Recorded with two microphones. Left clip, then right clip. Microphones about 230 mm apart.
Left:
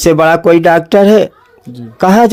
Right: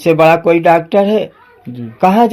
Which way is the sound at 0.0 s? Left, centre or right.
Left.